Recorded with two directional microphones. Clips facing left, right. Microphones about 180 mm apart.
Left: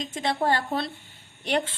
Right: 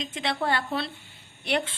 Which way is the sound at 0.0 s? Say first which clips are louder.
Left 3 dB; 45° left (ahead or behind).